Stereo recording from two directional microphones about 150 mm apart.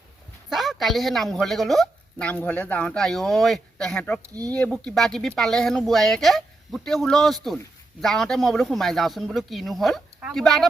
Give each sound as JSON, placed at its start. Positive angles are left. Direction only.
{"t": 0.5, "sound": "speech", "side_deg": 0}
{"t": 4.2, "sound": "speech", "side_deg": -25}
{"t": 4.5, "sound": "speech", "side_deg": 5}